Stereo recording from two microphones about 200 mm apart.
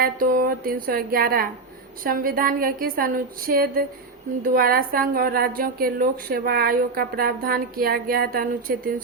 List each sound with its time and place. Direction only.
0.0 s a woman's voice: 45° right (ahead or behind)